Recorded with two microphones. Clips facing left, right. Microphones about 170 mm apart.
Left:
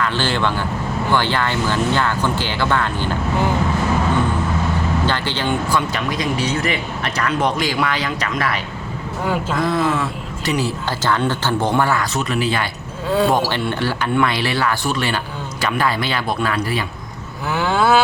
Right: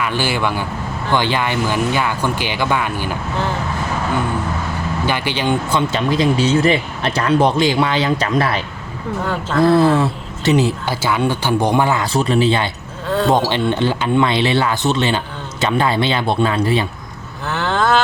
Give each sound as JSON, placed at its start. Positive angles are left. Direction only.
{"t": 0.0, "sound": "speech", "side_deg": -10}
{"t": 5.0, "sound": "speech", "side_deg": -15}
{"t": 9.2, "sound": "speech", "side_deg": 10}
{"t": 9.6, "sound": "speech", "side_deg": -30}
{"t": 12.1, "sound": "speech", "side_deg": -30}
{"t": 13.1, "sound": "speech", "side_deg": 10}
{"t": 13.3, "sound": "speech", "side_deg": -20}
{"t": 17.5, "sound": "vehicle", "side_deg": 10}